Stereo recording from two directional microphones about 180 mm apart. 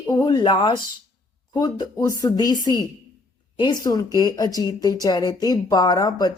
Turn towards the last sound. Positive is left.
turn(degrees=20)  # may be behind; listen again after turning